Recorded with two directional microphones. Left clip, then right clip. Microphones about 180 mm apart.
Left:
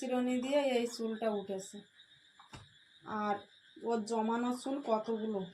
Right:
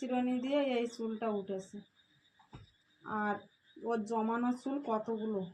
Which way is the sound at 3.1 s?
20° left (ahead or behind).